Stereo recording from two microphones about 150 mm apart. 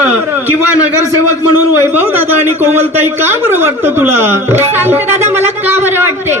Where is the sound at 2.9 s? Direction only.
15° right (ahead or behind).